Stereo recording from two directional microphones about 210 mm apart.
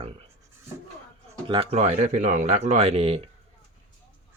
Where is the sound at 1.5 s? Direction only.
30° right (ahead or behind).